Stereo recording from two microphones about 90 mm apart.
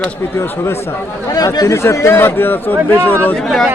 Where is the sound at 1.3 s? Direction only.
45° left (ahead or behind).